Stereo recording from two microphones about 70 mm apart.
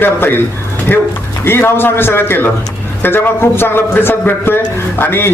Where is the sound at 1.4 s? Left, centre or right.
Left.